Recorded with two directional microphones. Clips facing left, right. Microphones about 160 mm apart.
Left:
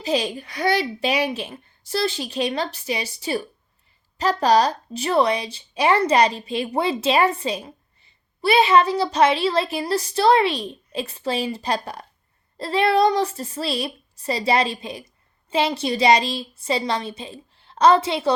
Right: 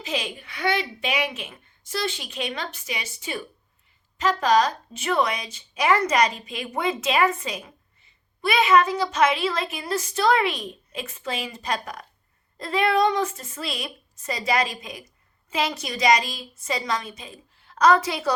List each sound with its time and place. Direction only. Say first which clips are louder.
0.0 s a woman's voice: left 7 dB; 35° left (ahead or behind)